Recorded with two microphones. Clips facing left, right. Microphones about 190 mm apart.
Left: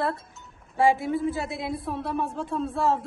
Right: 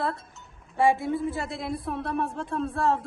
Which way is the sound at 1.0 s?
25° left (ahead or behind).